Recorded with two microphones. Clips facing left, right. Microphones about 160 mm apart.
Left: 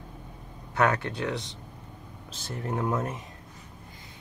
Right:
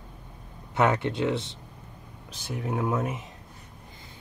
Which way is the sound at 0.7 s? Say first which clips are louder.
Right 2 dB; 20° right (ahead or behind).